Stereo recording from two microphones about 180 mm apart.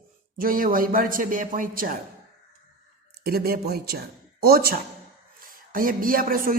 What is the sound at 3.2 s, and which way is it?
A man's voice, 60° right (ahead or behind).